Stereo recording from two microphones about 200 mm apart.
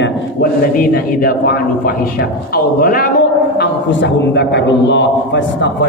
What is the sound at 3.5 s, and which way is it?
A man's voice, 60° left (ahead or behind).